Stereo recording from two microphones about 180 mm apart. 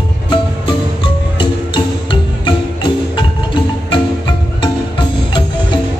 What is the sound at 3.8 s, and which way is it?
Music, 25° left (ahead or behind).